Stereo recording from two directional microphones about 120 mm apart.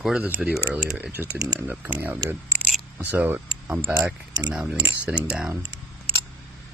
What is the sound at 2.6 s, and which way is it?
Camera, centre (ahead or behind).